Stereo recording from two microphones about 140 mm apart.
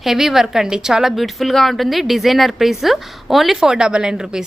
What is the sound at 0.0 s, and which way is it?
A woman's voice, centre (ahead or behind).